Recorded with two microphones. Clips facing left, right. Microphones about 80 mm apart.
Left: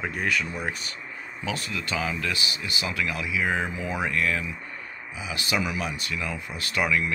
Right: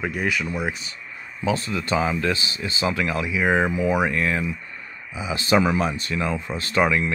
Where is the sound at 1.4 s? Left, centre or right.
Right.